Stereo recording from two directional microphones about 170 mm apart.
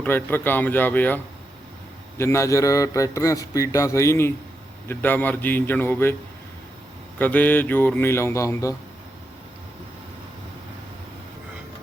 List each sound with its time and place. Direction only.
0.0 s a man's voice: 10° left (ahead or behind)
7.2 s a man's voice: 10° left (ahead or behind)